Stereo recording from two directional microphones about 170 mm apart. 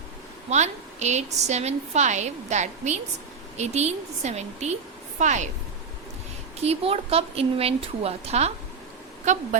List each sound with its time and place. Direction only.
0.5 s a woman's voice: 40° right (ahead or behind)
6.6 s a woman's voice: 35° right (ahead or behind)